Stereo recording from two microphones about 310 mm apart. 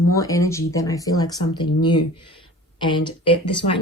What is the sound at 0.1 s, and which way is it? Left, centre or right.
Speech, centre.